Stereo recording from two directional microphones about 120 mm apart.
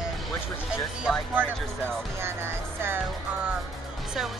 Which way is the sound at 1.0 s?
10° right (ahead or behind).